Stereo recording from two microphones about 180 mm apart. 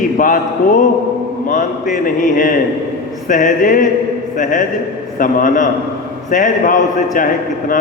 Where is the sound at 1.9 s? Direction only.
50° left (ahead or behind).